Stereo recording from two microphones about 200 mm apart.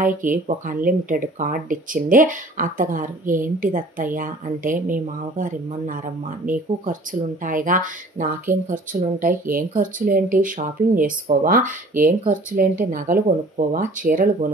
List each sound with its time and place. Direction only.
0.0 s speech: 40° right (ahead or behind)